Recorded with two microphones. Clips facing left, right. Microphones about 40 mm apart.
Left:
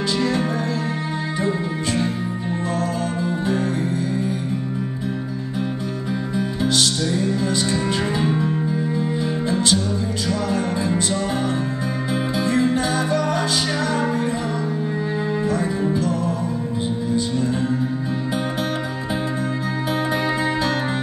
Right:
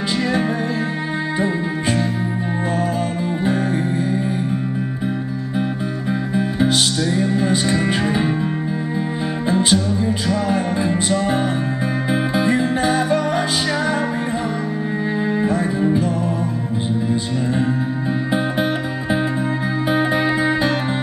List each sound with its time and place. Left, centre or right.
0.2 s music: centre
6.3 s music: right
9.5 s music: right
15.4 s music: right